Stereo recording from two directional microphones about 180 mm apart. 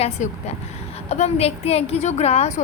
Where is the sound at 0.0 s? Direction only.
35° left (ahead or behind).